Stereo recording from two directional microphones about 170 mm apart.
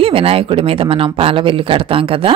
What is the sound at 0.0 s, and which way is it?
Speech, 35° right (ahead or behind).